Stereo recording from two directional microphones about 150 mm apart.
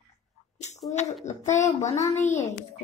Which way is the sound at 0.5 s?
50° left (ahead or behind).